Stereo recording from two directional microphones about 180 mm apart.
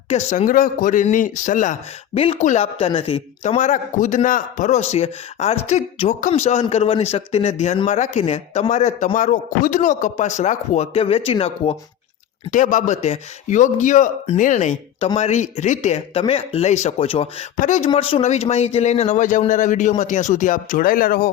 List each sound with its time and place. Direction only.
0.1 s speech: 40° left (ahead or behind)
2.1 s a man's voice: 30° left (ahead or behind)
12.5 s a man's voice: 45° left (ahead or behind)